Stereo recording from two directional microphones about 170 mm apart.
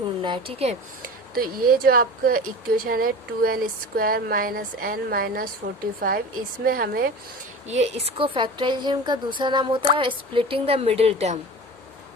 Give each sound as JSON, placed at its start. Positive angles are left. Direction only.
{"t": 0.2, "sound": "a woman's voice", "side_deg": -30}
{"t": 1.0, "sound": "speech", "side_deg": -60}
{"t": 7.7, "sound": "a woman's voice", "side_deg": -40}